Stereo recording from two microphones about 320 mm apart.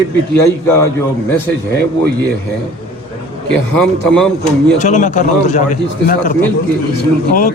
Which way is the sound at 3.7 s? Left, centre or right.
Centre.